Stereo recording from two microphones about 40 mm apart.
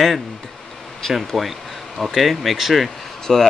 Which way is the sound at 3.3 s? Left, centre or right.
Centre.